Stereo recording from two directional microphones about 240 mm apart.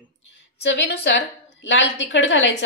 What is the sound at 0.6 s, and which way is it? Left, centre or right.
A woman's voice, left.